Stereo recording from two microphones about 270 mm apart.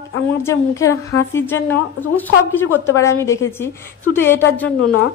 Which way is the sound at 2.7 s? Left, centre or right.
Centre.